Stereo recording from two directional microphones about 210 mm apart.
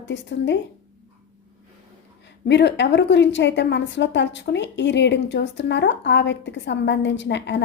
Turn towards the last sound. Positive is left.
turn(degrees=55)  # may be behind; listen again after turning